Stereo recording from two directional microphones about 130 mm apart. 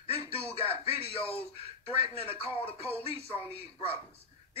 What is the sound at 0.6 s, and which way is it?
Speech, 45° left (ahead or behind).